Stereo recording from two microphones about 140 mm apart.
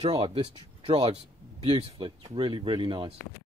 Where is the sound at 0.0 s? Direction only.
45° right (ahead or behind).